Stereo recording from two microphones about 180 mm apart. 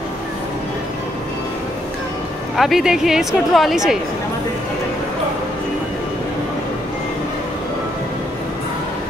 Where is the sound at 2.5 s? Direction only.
Centre (ahead or behind).